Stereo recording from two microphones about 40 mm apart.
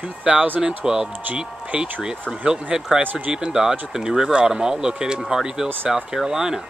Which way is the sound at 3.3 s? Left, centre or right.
Centre.